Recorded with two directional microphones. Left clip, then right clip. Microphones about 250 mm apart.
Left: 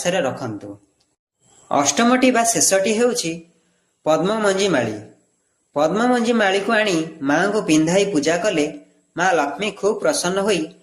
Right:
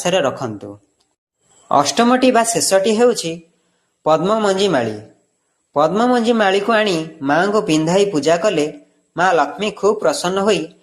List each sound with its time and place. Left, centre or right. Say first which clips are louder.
0.0 s a man's voice: right 4 dB; right